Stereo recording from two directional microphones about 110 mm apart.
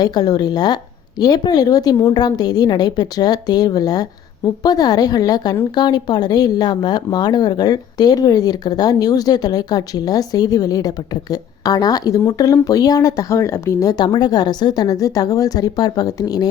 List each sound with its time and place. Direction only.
0.0 s speech: 35° left (ahead or behind)